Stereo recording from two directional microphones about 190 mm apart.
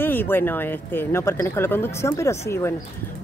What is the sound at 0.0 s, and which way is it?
Speech, 10° left (ahead or behind).